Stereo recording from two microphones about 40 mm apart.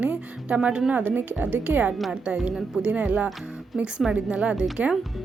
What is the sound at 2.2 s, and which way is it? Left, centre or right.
Speech, right.